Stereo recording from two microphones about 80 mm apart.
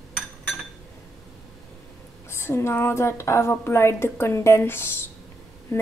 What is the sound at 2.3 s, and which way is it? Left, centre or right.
Speech, left.